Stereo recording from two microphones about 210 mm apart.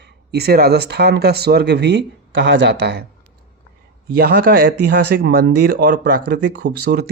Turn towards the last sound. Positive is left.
turn(degrees=-50)  # may be behind; listen again after turning